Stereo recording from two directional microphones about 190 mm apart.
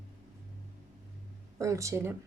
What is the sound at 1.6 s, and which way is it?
Speech, 15° right (ahead or behind).